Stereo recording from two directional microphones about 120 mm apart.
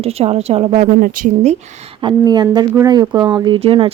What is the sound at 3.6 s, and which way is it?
Speech, 50° right (ahead or behind).